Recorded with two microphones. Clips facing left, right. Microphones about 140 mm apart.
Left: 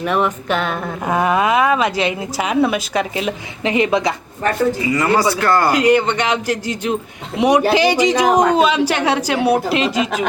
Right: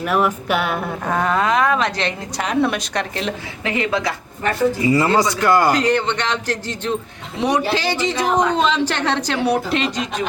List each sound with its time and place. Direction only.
0.0 s a sound: 5° right (ahead or behind)
1.0 s a woman's voice: 10° left (ahead or behind)
3.6 s speech: 20° left (ahead or behind)
4.9 s speech: 25° right (ahead or behind)
5.3 s a sound: 15° right (ahead or behind)
5.7 s a woman's voice: 10° left (ahead or behind)